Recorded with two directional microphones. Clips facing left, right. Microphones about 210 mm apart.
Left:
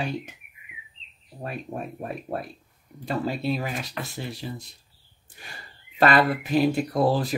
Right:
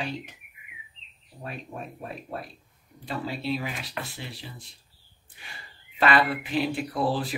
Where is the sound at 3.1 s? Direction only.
45° left (ahead or behind).